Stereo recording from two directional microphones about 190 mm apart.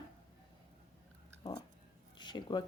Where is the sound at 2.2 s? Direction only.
25° left (ahead or behind).